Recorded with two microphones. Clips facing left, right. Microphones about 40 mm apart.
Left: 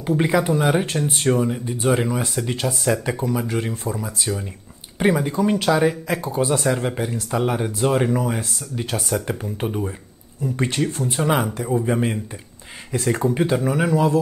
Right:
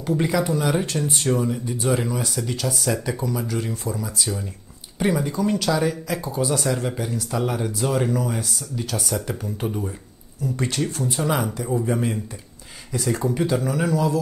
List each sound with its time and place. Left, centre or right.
0.0 s speech: left
13.2 s speech: left